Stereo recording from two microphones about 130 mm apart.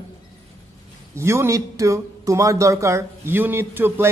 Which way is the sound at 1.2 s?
20° right (ahead or behind).